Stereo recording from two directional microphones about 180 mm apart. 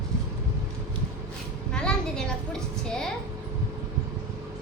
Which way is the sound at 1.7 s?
5° left (ahead or behind).